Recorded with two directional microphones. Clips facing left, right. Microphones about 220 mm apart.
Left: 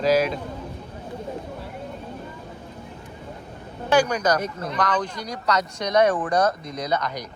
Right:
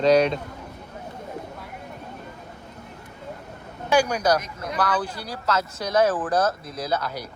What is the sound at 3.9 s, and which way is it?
A man's voice, 10° right (ahead or behind).